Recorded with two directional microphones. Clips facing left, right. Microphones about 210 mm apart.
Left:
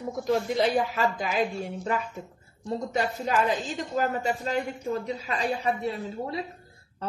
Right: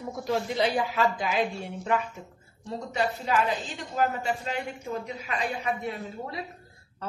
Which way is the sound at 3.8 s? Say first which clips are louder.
Left 1 dB; 40° left (ahead or behind).